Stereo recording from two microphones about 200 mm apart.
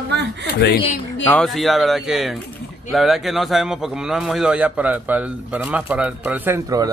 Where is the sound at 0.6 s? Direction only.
55° left (ahead or behind).